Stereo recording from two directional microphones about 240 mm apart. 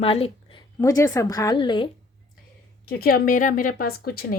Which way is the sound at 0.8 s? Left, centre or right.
Centre.